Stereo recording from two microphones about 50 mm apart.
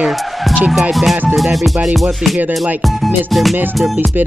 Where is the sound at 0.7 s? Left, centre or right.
Centre.